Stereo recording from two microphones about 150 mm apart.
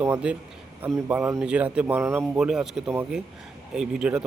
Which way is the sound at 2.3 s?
5° right (ahead or behind).